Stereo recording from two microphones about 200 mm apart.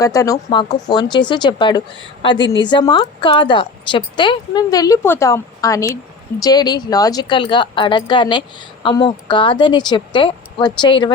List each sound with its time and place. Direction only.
0.0 s a woman's voice: 15° left (ahead or behind)